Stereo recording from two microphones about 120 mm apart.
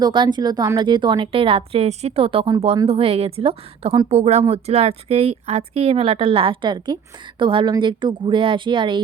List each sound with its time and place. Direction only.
0.0 s a woman's voice: 40° right (ahead or behind)